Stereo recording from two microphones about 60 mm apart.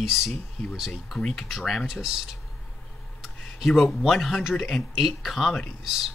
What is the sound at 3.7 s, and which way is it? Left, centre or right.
Speech, centre.